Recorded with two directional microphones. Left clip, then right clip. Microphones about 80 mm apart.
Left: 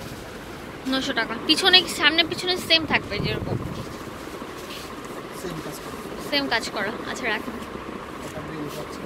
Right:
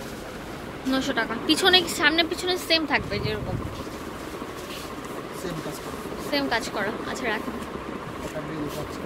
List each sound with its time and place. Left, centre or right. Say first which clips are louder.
0.8 s speech: left 1 dB; right
3.1 s speech: left 1 dB; centre
6.3 s speech: left 2 dB; centre